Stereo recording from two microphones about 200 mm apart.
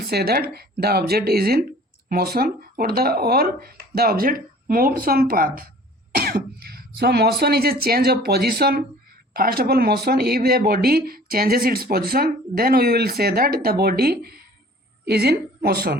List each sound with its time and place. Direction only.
0.0 s a woman's voice: 50° right (ahead or behind)